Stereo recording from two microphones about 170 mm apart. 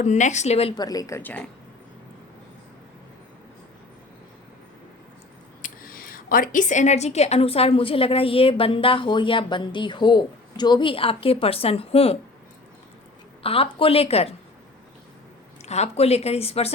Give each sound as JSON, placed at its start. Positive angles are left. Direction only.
{"t": 0.0, "sound": "a woman's voice", "side_deg": 45}
{"t": 0.8, "sound": "speech", "side_deg": 20}
{"t": 5.6, "sound": "a woman's voice", "side_deg": 55}
{"t": 13.4, "sound": "a woman's voice", "side_deg": 35}
{"t": 15.6, "sound": "a woman's voice", "side_deg": 40}